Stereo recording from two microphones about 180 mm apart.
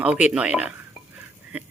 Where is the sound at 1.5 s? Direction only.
10° right (ahead or behind).